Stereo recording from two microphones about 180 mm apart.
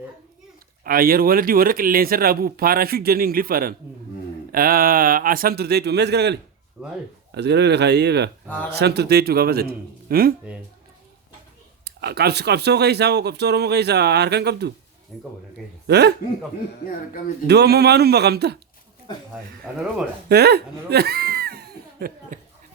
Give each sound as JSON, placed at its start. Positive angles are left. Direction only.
{"t": 0.9, "sound": "speech", "side_deg": -55}
{"t": 6.8, "sound": "speech", "side_deg": -10}
{"t": 7.3, "sound": "speech", "side_deg": -70}
{"t": 11.9, "sound": "speech", "side_deg": -65}
{"t": 15.1, "sound": "speech", "side_deg": 0}
{"t": 15.9, "sound": "speech", "side_deg": -65}
{"t": 17.4, "sound": "speech", "side_deg": -65}
{"t": 20.2, "sound": "speech", "side_deg": -65}